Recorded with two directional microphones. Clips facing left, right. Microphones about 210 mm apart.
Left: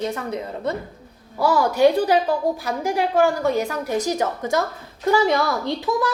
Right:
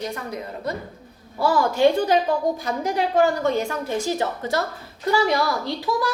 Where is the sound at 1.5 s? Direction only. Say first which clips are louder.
Left 2 dB; 10° left (ahead or behind).